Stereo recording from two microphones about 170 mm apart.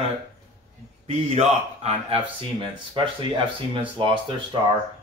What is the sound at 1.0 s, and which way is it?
Speech, 35° right (ahead or behind).